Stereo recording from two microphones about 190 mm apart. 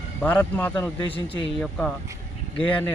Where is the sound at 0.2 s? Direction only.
10° left (ahead or behind).